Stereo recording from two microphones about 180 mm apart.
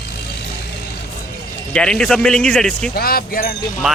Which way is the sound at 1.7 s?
5° left (ahead or behind).